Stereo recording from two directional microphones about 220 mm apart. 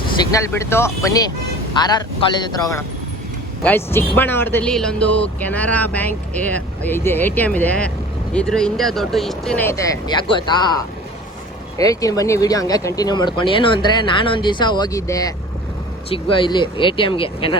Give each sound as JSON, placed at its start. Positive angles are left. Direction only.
{"t": 0.2, "sound": "speech", "side_deg": 15}